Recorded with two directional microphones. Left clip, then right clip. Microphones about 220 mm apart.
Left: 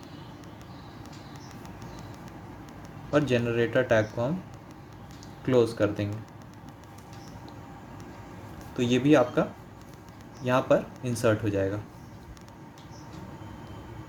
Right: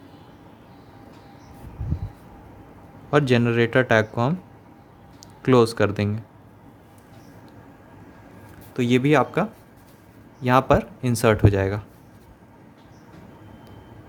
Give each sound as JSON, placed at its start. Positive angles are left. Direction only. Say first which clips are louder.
{"t": 3.1, "sound": "speech", "louder": "right 5 dB", "side_deg": -45}
{"t": 5.4, "sound": "speech", "louder": "right 6 dB", "side_deg": -45}
{"t": 8.7, "sound": "speech", "louder": "right 3 dB", "side_deg": -40}